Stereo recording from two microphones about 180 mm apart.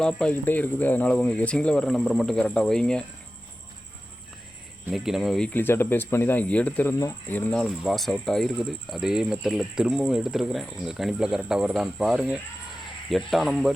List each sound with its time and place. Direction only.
0.0 s speech: 5° left (ahead or behind)
4.9 s speech: centre (ahead or behind)
5.5 s speech: 10° left (ahead or behind)